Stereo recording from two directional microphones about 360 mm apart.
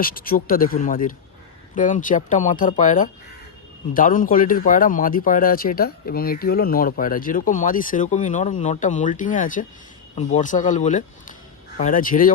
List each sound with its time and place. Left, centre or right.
0.0 s speech: left